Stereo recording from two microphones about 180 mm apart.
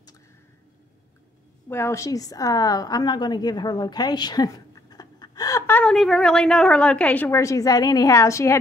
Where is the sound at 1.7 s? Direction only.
15° left (ahead or behind).